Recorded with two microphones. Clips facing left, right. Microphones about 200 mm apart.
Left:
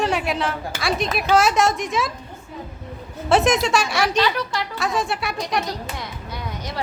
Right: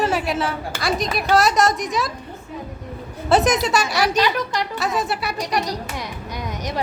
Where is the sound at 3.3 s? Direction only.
Centre (ahead or behind).